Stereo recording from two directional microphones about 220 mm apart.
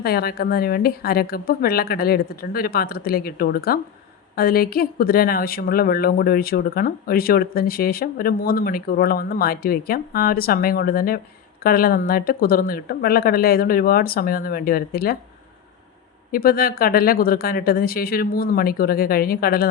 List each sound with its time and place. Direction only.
0.0 s a woman's voice: 45° left (ahead or behind)
16.3 s a woman's voice: 40° left (ahead or behind)